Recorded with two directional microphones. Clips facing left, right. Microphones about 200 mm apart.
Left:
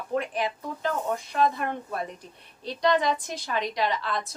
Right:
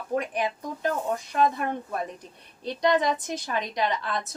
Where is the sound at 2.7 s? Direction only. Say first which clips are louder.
Right 1 dB; 20° right (ahead or behind).